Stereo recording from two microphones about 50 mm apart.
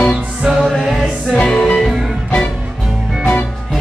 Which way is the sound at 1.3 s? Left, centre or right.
Centre.